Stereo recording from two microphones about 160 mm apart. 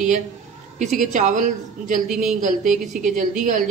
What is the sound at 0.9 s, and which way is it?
A woman's voice, 50° right (ahead or behind).